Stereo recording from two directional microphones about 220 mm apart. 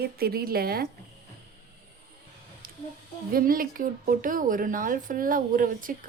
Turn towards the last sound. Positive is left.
turn(degrees=-40)  # may be behind; listen again after turning